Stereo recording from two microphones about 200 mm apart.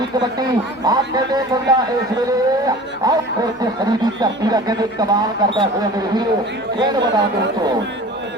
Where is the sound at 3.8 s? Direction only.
20° right (ahead or behind).